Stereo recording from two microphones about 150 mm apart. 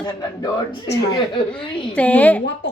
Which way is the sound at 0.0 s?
25° left (ahead or behind).